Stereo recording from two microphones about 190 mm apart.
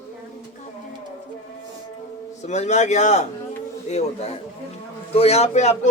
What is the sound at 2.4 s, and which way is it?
A man's voice, 40° left (ahead or behind).